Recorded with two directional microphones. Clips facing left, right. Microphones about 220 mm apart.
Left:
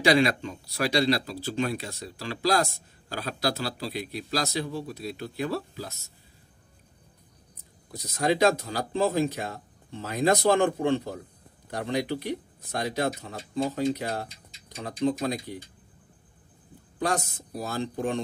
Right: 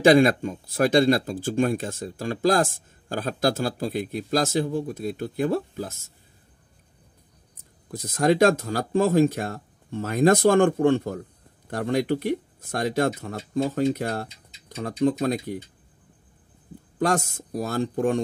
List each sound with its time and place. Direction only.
0.0 s speech: 50° right (ahead or behind)
7.9 s speech: 50° right (ahead or behind)
17.0 s speech: 45° right (ahead or behind)